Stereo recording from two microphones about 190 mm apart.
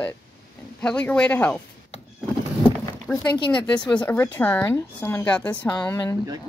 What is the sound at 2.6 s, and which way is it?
Vehicle, centre (ahead or behind).